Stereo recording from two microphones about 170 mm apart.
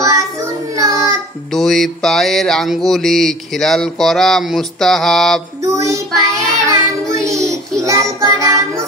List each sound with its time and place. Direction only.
0.7 s child singing: 20° right (ahead or behind)
1.5 s mantra: centre (ahead or behind)
5.6 s child singing: 20° right (ahead or behind)